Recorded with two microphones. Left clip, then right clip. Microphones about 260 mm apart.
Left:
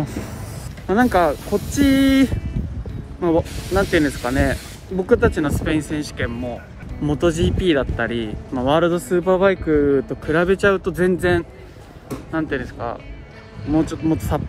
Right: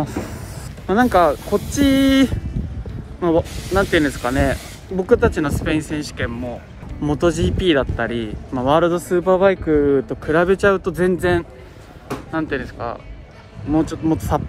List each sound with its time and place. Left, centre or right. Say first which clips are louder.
0.0 s a sound: right 3 dB; centre
0.8 s speech: right 2 dB; centre
3.4 s speech: even; right
3.7 s speech: right 1 dB; centre